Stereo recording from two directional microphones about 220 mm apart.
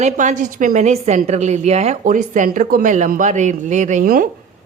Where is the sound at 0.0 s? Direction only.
35° right (ahead or behind).